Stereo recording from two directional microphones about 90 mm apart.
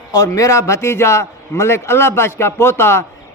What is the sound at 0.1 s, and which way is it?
A man's voice, 40° left (ahead or behind).